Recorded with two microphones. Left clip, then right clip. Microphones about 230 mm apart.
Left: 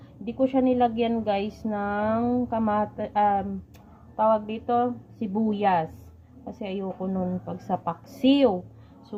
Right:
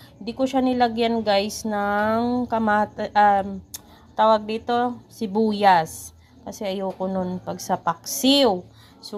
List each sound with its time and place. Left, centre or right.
0.3 s a woman's voice: centre